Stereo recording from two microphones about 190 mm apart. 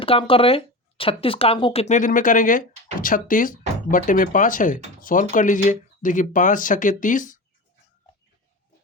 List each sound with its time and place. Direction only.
0.0 s speech: 30° left (ahead or behind)